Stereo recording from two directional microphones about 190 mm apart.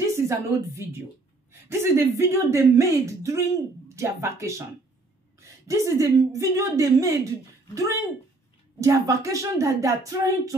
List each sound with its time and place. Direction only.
0.0 s a woman's voice: 15° right (ahead or behind)